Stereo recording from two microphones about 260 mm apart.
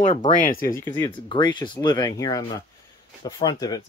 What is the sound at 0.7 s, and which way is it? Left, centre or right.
Speech, centre.